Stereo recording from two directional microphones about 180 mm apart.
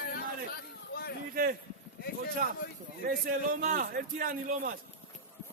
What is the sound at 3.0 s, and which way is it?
A man's voice, 50° right (ahead or behind).